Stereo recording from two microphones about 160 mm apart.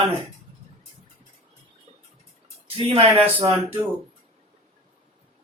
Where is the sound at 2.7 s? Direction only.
40° right (ahead or behind).